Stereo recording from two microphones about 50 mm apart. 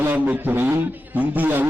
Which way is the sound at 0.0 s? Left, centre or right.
Right.